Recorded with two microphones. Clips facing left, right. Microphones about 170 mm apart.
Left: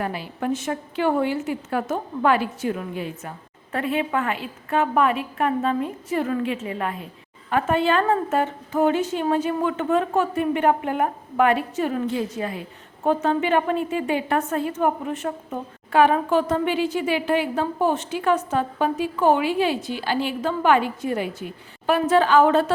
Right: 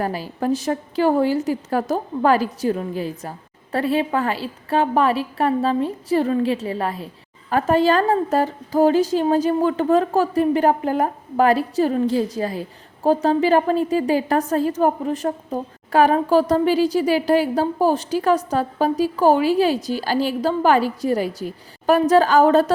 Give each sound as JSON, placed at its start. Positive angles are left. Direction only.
{"t": 0.0, "sound": "a woman's voice", "side_deg": -40}